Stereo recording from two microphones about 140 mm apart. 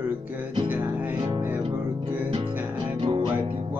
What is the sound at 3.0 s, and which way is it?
Music, 40° right (ahead or behind).